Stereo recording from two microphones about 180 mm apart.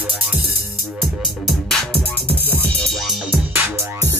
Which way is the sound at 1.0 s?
Centre (ahead or behind).